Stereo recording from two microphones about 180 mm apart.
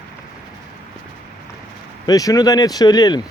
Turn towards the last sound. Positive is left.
turn(degrees=20)  # may be behind; listen again after turning